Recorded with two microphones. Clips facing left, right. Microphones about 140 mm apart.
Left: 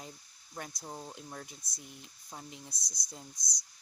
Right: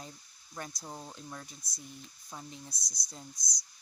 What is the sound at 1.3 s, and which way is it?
Speech, 25° left (ahead or behind).